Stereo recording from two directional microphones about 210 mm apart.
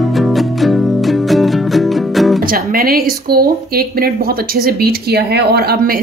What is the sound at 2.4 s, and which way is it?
Music, 45° right (ahead or behind).